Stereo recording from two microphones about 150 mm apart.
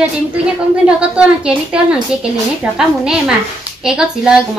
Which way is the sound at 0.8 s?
5° right (ahead or behind).